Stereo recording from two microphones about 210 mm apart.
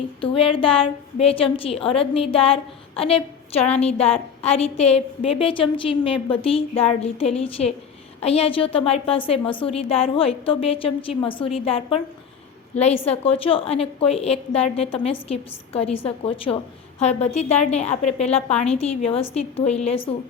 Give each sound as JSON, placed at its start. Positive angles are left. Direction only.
{"t": 0.2, "sound": "a woman's voice", "side_deg": 25}